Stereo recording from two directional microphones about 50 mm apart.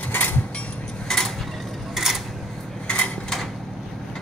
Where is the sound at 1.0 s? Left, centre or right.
Centre.